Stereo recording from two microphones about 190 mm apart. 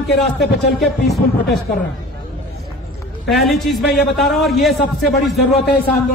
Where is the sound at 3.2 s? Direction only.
Centre (ahead or behind).